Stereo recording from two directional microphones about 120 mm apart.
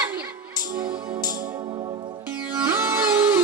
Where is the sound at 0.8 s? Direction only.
35° right (ahead or behind).